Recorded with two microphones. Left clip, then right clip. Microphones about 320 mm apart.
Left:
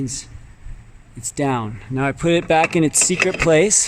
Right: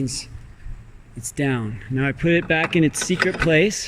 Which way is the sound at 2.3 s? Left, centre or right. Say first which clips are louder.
Left 5 dB; centre.